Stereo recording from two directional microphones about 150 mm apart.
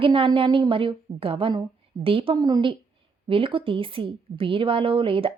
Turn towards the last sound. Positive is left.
turn(degrees=-35)  # may be behind; listen again after turning